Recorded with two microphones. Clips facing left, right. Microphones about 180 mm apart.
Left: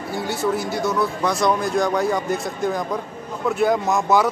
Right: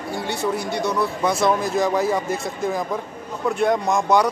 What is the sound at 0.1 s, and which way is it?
Speech, centre (ahead or behind).